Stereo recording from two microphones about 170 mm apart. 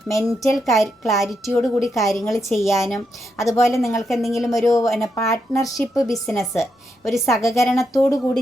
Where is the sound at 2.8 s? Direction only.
15° left (ahead or behind).